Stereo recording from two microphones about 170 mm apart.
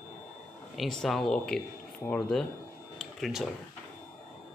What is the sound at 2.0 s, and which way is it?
Speech, 20° left (ahead or behind).